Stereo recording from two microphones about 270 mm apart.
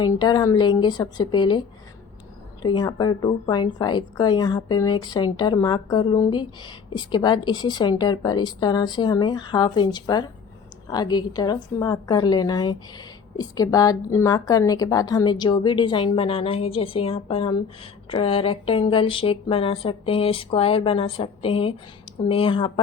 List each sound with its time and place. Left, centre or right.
0.0 s a woman's voice: centre